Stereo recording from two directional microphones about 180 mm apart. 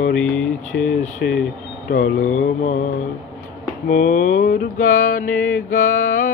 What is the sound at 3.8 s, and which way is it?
Mantra, 45° left (ahead or behind).